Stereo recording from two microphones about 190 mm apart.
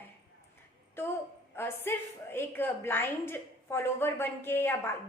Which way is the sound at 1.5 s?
10° left (ahead or behind).